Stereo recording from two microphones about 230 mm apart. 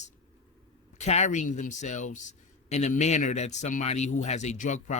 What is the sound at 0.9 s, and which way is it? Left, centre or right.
Speech, left.